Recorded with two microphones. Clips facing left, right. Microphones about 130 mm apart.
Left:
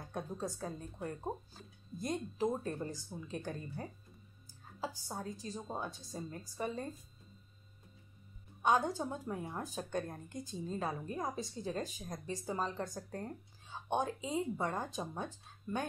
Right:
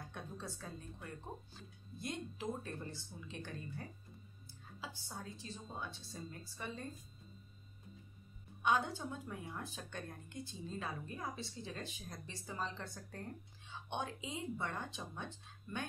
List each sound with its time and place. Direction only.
0.1 s a woman's voice: 40° left (ahead or behind)
8.6 s a woman's voice: 40° left (ahead or behind)